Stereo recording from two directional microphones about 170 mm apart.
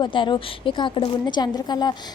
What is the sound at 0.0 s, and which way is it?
A woman's voice, 30° left (ahead or behind).